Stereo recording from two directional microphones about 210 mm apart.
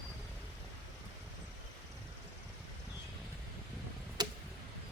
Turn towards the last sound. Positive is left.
turn(degrees=-20)  # may be behind; listen again after turning